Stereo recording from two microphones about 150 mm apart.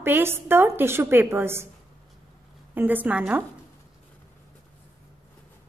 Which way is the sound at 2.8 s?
10° right (ahead or behind).